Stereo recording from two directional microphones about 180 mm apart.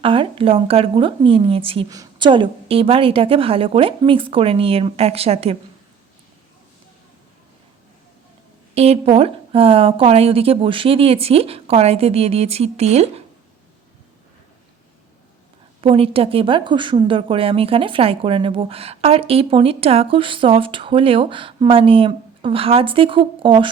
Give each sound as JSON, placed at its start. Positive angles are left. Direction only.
{"t": 0.0, "sound": "a woman's voice", "side_deg": -30}
{"t": 8.7, "sound": "a woman's voice", "side_deg": -35}
{"t": 15.8, "sound": "a woman's voice", "side_deg": -30}